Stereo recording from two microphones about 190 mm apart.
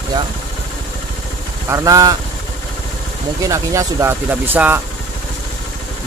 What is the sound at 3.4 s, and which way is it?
Speech, 15° right (ahead or behind).